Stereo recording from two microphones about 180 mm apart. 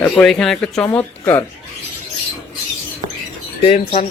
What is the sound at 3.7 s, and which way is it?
Speech, 35° left (ahead or behind).